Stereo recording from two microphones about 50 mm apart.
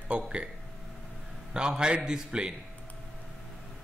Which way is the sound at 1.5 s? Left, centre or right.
Centre.